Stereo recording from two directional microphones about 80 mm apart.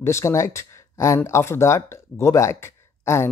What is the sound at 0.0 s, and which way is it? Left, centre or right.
Speech, left.